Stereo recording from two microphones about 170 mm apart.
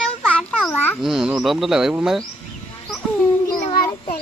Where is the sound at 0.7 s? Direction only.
10° left (ahead or behind).